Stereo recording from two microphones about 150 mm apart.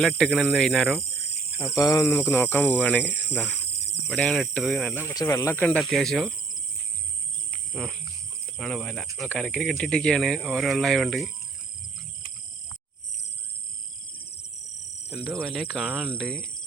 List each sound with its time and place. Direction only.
0.2 s speech: 5° left (ahead or behind)
1.5 s speech: 20° left (ahead or behind)
4.1 s speech: centre (ahead or behind)
4.8 s speech: 10° left (ahead or behind)
5.8 s speech: centre (ahead or behind)
7.7 s speech: centre (ahead or behind)
14.2 s a sound: 90° left
15.4 s speech: centre (ahead or behind)
16.0 s speech: 5° left (ahead or behind)